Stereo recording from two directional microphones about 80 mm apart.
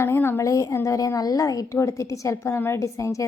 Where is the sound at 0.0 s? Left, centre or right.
Left.